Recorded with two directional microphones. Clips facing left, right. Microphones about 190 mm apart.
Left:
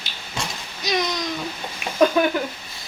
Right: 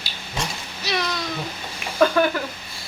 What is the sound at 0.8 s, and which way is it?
Speech, 15° left (ahead or behind).